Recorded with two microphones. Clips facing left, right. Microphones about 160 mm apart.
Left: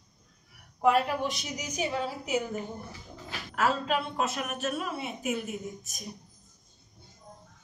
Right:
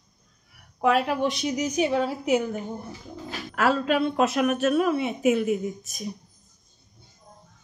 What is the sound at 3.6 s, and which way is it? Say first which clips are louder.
A woman's voice: right 6 dB; 75° right (ahead or behind).